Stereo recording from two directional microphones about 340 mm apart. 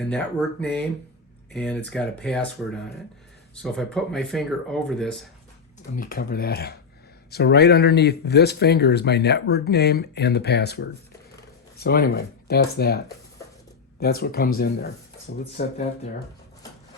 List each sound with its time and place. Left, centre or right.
0.6 s speech: centre
6.0 s speech: left
14.0 s speech: left